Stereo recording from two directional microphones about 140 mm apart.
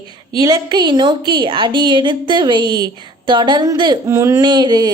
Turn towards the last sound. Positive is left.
turn(degrees=-30)  # may be behind; listen again after turning